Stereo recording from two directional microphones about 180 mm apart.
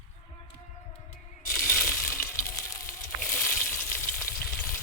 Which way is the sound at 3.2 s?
5° left (ahead or behind).